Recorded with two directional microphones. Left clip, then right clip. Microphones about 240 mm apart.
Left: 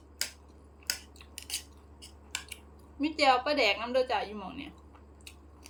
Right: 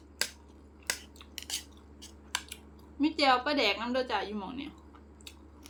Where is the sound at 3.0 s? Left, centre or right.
Centre.